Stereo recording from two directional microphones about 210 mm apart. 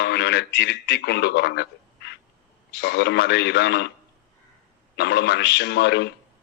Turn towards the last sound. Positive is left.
turn(degrees=55)  # may be behind; listen again after turning